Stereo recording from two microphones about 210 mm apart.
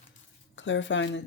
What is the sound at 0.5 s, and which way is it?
Speech, 60° left (ahead or behind).